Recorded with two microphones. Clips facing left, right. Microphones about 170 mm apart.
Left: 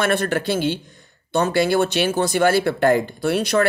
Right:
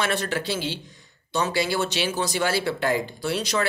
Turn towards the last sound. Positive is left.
turn(degrees=55)  # may be behind; listen again after turning